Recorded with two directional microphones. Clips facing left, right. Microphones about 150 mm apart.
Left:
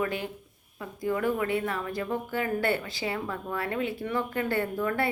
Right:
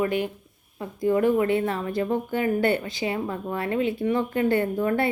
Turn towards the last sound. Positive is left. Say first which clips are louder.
# right 5 dB
turn(degrees=-25)  # may be behind; listen again after turning